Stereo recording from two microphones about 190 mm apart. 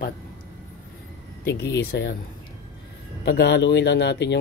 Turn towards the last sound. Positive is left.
turn(degrees=65)  # may be behind; listen again after turning